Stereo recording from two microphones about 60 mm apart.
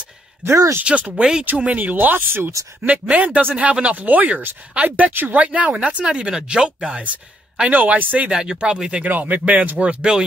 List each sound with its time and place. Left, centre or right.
0.8 s speech: right
2.9 s speech: right
8.3 s speech: centre
9.0 s speech: right